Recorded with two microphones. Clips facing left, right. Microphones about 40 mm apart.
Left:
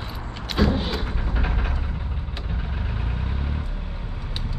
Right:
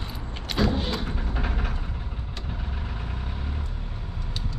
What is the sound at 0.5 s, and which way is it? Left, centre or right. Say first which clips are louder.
Vehicle: left 2 dB; centre.